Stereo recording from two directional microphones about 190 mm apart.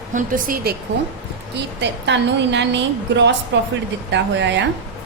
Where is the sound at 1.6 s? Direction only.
65° right (ahead or behind).